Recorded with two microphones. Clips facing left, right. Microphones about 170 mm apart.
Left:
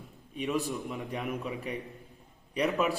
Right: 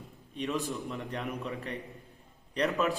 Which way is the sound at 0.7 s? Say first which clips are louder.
Left 1 dB; centre (ahead or behind).